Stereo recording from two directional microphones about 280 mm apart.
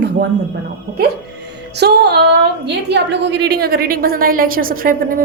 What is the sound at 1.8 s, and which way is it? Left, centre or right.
A woman's voice, right.